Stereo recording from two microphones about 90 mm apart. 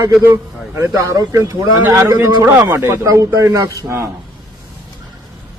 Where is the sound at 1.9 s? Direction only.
35° right (ahead or behind).